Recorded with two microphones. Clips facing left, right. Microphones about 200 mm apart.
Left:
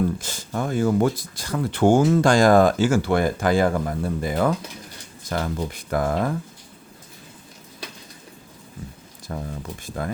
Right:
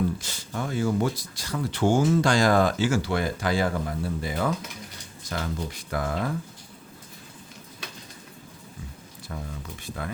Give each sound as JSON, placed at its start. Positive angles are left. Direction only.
{"t": 0.2, "sound": "speech", "side_deg": 45}
{"t": 9.3, "sound": "speech", "side_deg": 40}